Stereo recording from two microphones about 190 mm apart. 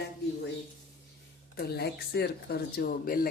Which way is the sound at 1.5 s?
55° left (ahead or behind).